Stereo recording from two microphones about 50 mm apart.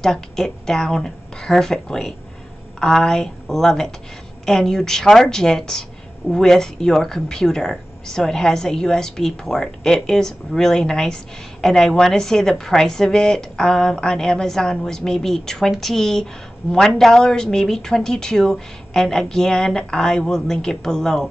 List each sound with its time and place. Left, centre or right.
0.0 s speech: centre